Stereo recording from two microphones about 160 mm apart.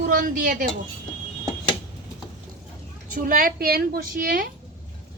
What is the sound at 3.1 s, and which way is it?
Speech, 65° right (ahead or behind).